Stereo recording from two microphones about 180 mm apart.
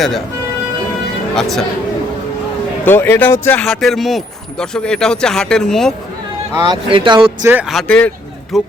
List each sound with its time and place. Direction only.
1.4 s speech: centre (ahead or behind)
2.8 s speech: 10° left (ahead or behind)
3.6 s speech: centre (ahead or behind)
6.6 s speech: 25° right (ahead or behind)
7.7 s speech: 5° left (ahead or behind)